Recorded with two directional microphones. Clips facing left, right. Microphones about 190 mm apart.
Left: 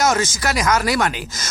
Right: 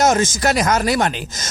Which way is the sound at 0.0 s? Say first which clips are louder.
Right 3 dB; 20° right (ahead or behind).